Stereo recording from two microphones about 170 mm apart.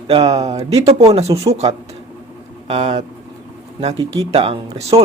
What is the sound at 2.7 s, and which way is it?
Speech, 35° right (ahead or behind).